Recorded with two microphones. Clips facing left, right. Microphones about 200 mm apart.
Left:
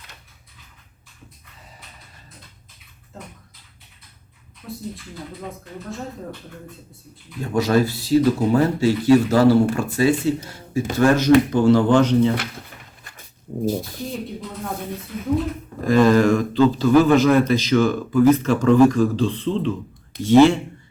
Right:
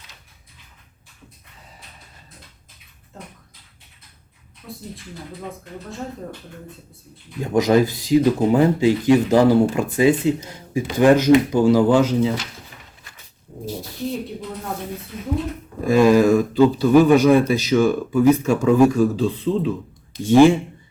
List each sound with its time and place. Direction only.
7.5 s a man's voice: 20° right (ahead or behind)
15.9 s a man's voice: 10° right (ahead or behind)